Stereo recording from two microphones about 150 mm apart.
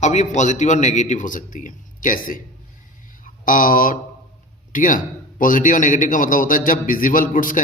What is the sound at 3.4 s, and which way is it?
A man's voice, 65° left (ahead or behind).